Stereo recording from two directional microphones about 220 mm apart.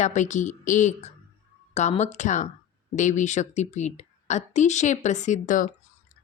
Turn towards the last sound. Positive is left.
turn(degrees=35)  # may be behind; listen again after turning